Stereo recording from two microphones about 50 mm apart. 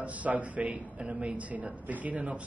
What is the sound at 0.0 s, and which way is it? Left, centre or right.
A woman's voice, right.